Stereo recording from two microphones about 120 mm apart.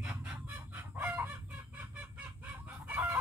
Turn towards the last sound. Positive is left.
turn(degrees=-10)  # may be behind; listen again after turning